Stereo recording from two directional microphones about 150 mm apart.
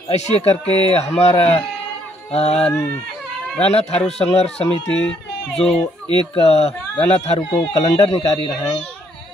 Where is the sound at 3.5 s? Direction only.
45° left (ahead or behind).